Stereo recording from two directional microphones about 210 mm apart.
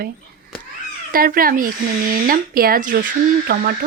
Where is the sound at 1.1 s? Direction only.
45° right (ahead or behind).